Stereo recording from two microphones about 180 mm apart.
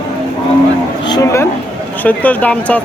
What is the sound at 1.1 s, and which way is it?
Speech, 15° left (ahead or behind).